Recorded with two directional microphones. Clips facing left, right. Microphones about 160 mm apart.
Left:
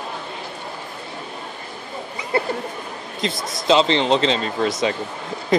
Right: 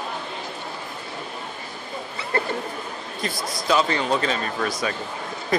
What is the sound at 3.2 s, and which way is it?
Speech, 20° left (ahead or behind).